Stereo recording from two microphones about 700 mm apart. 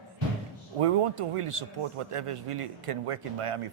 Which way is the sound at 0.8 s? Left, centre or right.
Right.